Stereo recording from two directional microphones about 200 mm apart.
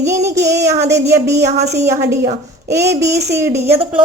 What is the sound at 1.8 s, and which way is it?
A woman's voice, 15° right (ahead or behind).